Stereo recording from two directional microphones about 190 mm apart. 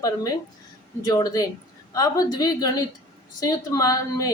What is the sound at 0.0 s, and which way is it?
A woman's voice, 20° left (ahead or behind).